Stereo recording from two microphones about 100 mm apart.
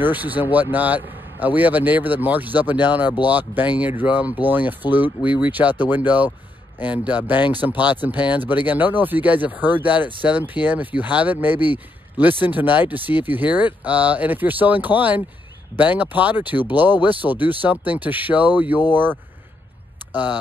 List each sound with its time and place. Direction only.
0.0 s speech: 15° right (ahead or behind)